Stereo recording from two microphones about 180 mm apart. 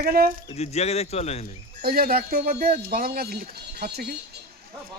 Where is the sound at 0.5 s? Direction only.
35° left (ahead or behind).